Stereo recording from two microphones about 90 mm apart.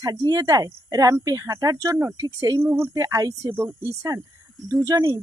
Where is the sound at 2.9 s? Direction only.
40° right (ahead or behind).